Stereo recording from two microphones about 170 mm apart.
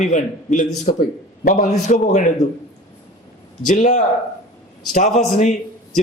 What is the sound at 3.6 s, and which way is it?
A man's voice, 45° left (ahead or behind).